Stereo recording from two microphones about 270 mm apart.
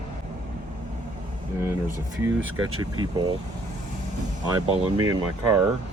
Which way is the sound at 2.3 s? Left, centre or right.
Right.